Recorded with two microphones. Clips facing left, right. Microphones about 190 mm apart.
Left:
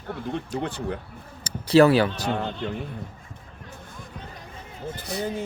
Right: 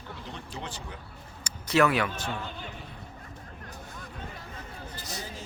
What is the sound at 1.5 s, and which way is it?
Speech, 30° left (ahead or behind).